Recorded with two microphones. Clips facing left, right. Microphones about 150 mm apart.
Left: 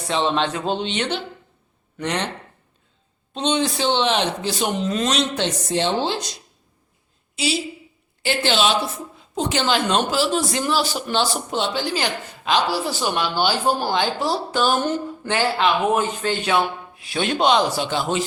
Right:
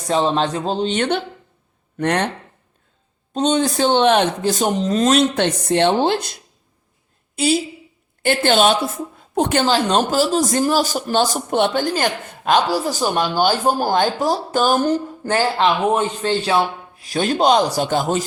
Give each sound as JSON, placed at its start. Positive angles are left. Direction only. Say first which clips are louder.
{"t": 0.1, "sound": "a man's voice", "louder": "right 3 dB", "side_deg": -40}
{"t": 3.3, "sound": "a man's voice", "louder": "right 4 dB", "side_deg": -45}
{"t": 7.3, "sound": "a woman's voice", "louder": "right 6 dB", "side_deg": -50}
{"t": 9.1, "sound": "a sound", "louder": "right 5 dB", "side_deg": -55}
{"t": 9.6, "sound": "a man's voice", "louder": "right 3 dB", "side_deg": -35}